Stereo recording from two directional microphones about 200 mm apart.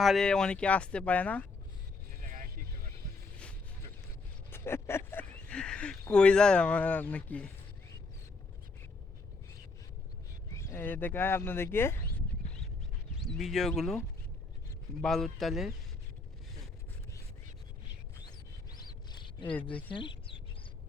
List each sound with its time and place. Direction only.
0.0 s speech: centre (ahead or behind)
2.2 s vehicle: 40° right (ahead or behind)
4.5 s speech: 10° left (ahead or behind)
10.5 s speech: 15° left (ahead or behind)
13.2 s speech: centre (ahead or behind)
15.0 s speech: centre (ahead or behind)
18.2 s a sound: 20° left (ahead or behind)
19.9 s bird: 25° left (ahead or behind)